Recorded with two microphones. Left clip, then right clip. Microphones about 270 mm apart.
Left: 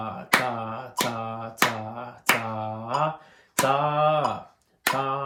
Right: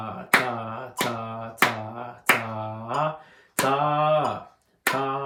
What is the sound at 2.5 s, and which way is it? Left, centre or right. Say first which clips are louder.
Mantra: left 1 dB; centre.